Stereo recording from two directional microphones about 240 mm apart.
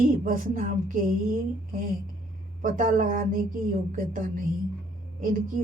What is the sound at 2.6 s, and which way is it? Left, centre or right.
Speech, right.